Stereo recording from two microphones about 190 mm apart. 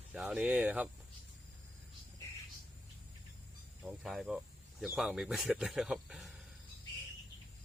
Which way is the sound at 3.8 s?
Centre (ahead or behind).